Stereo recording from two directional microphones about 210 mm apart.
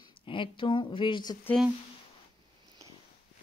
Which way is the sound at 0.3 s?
25° left (ahead or behind).